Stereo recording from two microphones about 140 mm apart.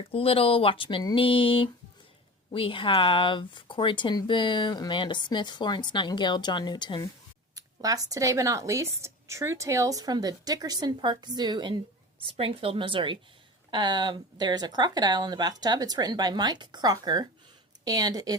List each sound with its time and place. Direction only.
0.1 s speech: 40° left (ahead or behind)
7.5 s speech: 25° right (ahead or behind)